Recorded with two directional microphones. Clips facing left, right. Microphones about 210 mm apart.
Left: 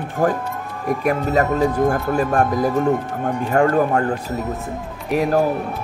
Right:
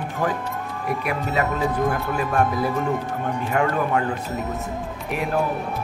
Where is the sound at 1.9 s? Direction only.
45° left (ahead or behind).